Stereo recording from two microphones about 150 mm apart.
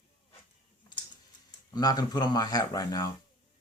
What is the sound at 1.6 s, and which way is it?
Speech, 25° left (ahead or behind).